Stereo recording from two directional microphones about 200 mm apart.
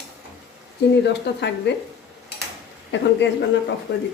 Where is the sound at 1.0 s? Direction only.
60° left (ahead or behind).